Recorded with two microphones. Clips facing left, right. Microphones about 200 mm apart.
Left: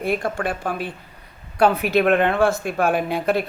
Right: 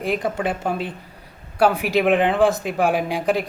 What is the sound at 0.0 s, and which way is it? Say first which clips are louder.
Speech: even; 15° right (ahead or behind).